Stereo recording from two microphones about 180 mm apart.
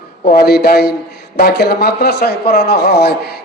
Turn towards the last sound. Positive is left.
turn(degrees=65)  # may be behind; listen again after turning